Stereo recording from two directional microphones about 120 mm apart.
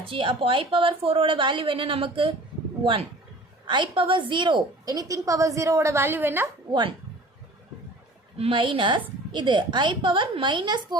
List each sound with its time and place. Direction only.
0.0 s a woman's voice: 45° right (ahead or behind); by 6.5 s 15° right (ahead or behind)
8.4 s a woman's voice: 45° right (ahead or behind)